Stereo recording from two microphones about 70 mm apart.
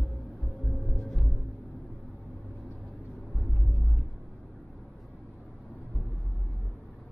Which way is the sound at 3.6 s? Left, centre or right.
Centre.